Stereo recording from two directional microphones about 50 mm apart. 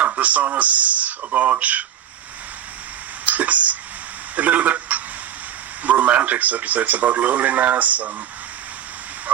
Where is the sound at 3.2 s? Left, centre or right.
Right.